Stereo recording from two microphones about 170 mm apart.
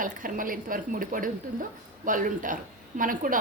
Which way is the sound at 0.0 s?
55° right (ahead or behind).